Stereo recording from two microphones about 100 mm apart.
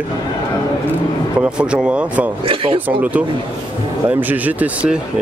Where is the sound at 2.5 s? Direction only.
65° right (ahead or behind).